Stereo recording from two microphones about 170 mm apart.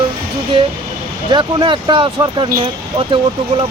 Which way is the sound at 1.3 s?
30° right (ahead or behind).